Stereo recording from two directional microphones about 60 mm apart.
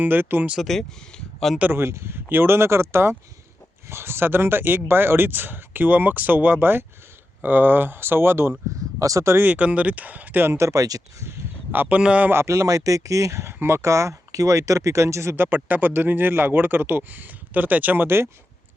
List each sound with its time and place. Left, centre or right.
0.0 s speech: right
0.6 s speech: centre
1.7 s speech: right
9.0 s speech: right
9.5 s speech: right
10.4 s speech: right
10.7 s speech: right
11.3 s a sound: right
11.9 s speech: right
12.3 s speech: right
12.5 s speech: right
13.5 s speech: right
15.4 s speech: right